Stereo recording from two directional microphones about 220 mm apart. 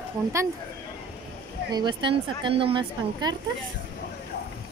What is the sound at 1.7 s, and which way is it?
Speech, 20° right (ahead or behind).